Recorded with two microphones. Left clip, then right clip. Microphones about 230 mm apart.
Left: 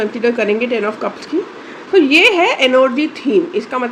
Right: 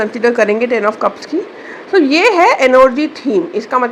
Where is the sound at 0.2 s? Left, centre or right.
Centre.